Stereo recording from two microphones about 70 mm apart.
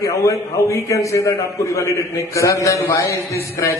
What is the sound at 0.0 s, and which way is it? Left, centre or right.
A man's voice, left.